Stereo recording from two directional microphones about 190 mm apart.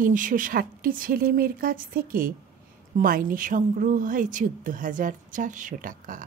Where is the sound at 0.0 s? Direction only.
45° right (ahead or behind).